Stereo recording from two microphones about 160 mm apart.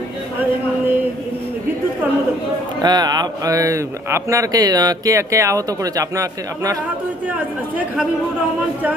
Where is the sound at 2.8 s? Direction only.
25° right (ahead or behind).